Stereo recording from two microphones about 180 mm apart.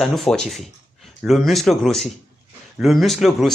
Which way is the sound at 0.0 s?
Centre (ahead or behind).